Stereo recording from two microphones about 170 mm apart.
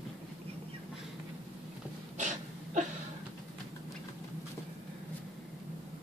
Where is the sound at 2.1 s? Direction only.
45° right (ahead or behind).